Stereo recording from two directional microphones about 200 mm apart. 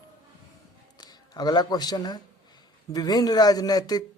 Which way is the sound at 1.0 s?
20° left (ahead or behind).